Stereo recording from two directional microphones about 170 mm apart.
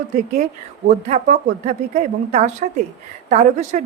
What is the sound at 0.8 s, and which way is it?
A woman's voice, 45° right (ahead or behind).